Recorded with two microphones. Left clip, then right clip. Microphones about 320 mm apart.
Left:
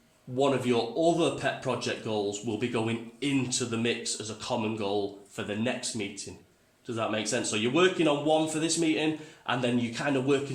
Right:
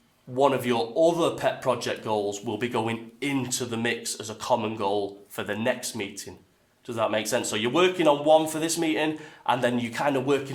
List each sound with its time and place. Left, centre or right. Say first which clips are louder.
0.4 s speech: right 3 dB; right
6.9 s speech: right 5 dB; centre